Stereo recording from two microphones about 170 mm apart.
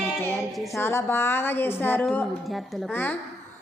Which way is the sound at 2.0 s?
Centre (ahead or behind).